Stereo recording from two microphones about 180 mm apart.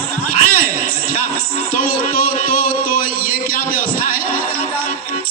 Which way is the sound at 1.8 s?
50° left (ahead or behind).